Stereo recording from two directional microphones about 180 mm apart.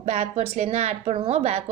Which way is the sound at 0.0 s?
35° right (ahead or behind).